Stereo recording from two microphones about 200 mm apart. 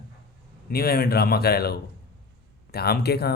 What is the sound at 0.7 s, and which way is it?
Speech, 50° left (ahead or behind).